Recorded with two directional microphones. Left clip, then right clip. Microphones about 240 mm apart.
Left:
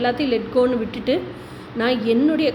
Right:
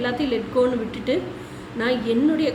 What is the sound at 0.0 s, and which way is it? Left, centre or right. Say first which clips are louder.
A woman's voice: left 3 dB; left.